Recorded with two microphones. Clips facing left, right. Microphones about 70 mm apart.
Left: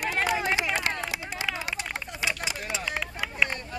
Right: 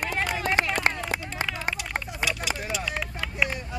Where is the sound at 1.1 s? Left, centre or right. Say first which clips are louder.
Right 2 dB; right.